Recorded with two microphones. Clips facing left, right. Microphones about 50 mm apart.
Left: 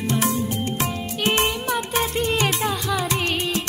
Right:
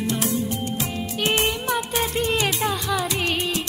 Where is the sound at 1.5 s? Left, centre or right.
Centre.